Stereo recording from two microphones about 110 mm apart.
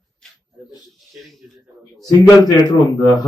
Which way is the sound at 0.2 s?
5° left (ahead or behind).